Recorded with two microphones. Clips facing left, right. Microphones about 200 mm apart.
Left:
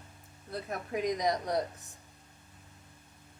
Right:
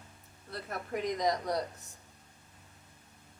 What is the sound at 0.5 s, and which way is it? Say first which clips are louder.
A woman's voice: left 2 dB; 15° left (ahead or behind).